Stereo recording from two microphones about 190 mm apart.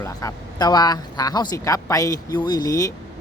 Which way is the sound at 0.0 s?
15° left (ahead or behind).